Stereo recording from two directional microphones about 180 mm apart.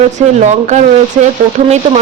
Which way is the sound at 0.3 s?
40° right (ahead or behind).